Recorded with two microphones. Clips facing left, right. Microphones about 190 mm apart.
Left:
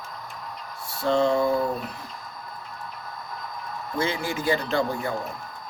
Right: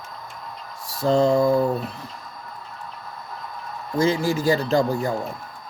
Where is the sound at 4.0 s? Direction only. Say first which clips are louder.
Right 7 dB; 40° right (ahead or behind).